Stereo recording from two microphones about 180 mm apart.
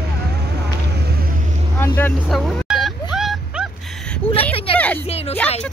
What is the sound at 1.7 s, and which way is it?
Vehicle, 10° left (ahead or behind).